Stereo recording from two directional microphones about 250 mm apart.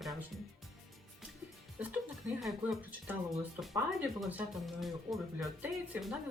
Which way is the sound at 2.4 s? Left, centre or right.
Centre.